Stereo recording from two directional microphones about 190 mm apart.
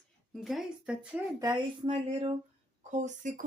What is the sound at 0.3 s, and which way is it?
Speech, centre (ahead or behind).